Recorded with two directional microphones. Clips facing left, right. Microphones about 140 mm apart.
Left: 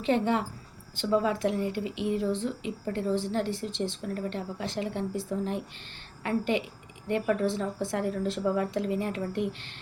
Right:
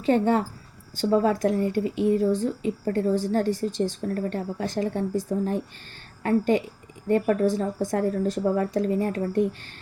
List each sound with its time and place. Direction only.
0.0 s a woman's voice: 45° right (ahead or behind)